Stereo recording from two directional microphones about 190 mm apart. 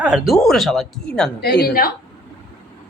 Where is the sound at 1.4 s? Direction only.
60° left (ahead or behind).